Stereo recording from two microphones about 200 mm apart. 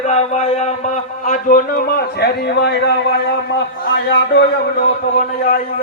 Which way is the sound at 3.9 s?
60° left (ahead or behind).